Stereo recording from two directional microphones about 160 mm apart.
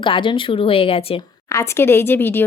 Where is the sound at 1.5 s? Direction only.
15° left (ahead or behind).